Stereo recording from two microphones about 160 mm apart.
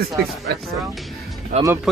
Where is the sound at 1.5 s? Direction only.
45° right (ahead or behind).